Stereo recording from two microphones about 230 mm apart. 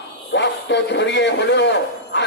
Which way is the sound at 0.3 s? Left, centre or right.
Left.